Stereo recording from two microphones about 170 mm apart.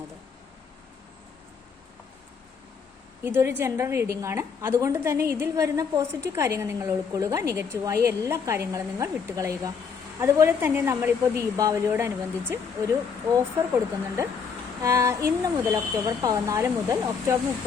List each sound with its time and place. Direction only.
3.2 s a woman's voice: 15° right (ahead or behind)